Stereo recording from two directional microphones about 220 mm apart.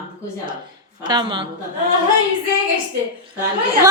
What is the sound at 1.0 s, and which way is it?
Speech, 20° right (ahead or behind).